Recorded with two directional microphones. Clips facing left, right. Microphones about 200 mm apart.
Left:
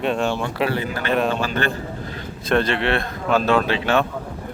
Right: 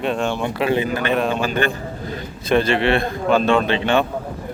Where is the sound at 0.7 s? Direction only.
20° right (ahead or behind).